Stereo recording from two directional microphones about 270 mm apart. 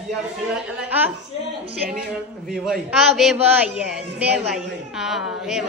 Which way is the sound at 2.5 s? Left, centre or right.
Centre.